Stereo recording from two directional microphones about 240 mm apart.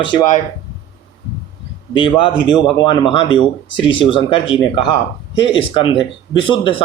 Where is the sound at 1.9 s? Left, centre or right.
Centre.